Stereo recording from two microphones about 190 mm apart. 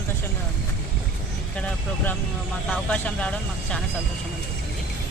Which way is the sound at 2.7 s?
5° left (ahead or behind).